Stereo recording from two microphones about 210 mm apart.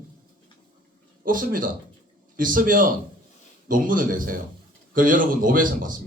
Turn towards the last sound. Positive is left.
turn(degrees=-40)  # may be behind; listen again after turning